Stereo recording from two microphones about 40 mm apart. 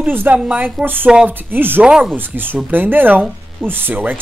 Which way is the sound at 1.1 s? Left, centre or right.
Centre.